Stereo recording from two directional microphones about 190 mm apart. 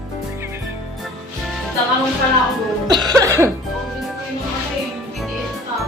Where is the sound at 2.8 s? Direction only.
20° right (ahead or behind).